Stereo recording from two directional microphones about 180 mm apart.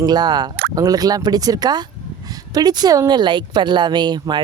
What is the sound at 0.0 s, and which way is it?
Speech, 25° right (ahead or behind).